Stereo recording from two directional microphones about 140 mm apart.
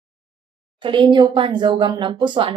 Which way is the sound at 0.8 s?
35° right (ahead or behind).